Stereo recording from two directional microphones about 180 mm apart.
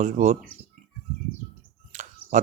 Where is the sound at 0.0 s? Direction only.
40° right (ahead or behind).